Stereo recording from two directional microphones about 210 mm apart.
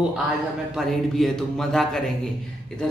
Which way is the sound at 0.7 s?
Centre (ahead or behind).